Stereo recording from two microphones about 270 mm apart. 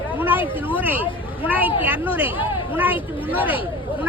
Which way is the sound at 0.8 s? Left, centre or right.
Centre.